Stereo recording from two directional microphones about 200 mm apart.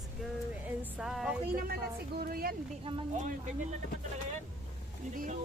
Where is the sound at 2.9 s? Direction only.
25° right (ahead or behind).